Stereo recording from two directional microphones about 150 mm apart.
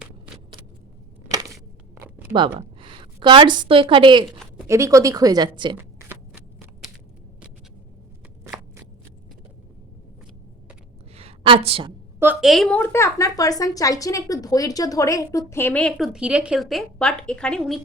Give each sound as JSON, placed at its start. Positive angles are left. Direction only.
{"t": 2.0, "sound": "a sound", "side_deg": -10}
{"t": 2.6, "sound": "a woman's voice", "side_deg": -35}
{"t": 4.6, "sound": "a woman's voice", "side_deg": -20}
{"t": 8.4, "sound": "shuffling cards", "side_deg": -10}
{"t": 11.1, "sound": "a sound", "side_deg": -40}
{"t": 12.2, "sound": "a woman's voice", "side_deg": -10}
{"t": 12.5, "sound": "a woman's voice", "side_deg": 0}
{"t": 12.7, "sound": "a woman's voice", "side_deg": 15}